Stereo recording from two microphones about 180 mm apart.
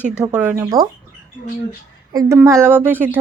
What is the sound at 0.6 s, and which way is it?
Speech, 20° right (ahead or behind).